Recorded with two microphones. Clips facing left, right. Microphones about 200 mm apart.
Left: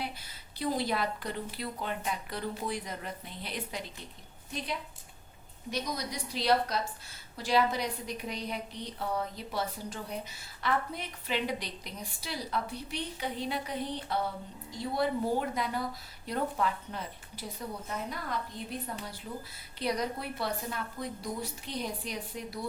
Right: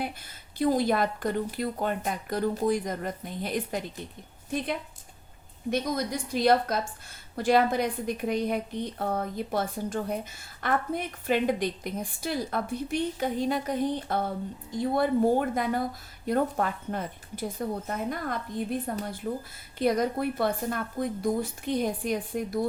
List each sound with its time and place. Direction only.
0.6 s a woman's voice: 50° right (ahead or behind)